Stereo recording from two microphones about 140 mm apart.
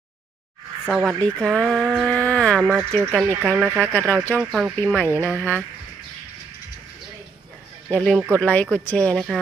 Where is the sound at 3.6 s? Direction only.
15° right (ahead or behind).